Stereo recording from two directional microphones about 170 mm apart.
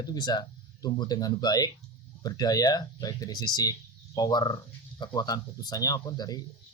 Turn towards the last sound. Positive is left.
turn(degrees=20)  # may be behind; listen again after turning